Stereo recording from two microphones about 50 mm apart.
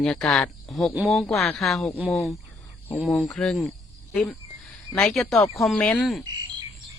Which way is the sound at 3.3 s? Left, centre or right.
Centre.